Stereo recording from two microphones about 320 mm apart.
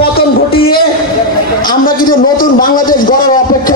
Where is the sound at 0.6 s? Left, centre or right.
Left.